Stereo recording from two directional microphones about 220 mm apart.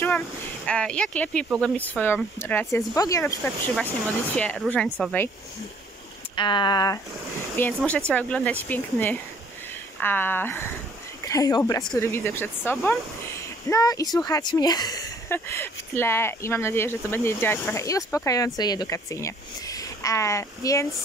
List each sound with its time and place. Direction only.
0.7 s speech: 5° left (ahead or behind)
6.3 s speech: 20° left (ahead or behind)
11.8 s speech: centre (ahead or behind)
12.7 s speech: centre (ahead or behind)
13.7 s speech: 15° left (ahead or behind)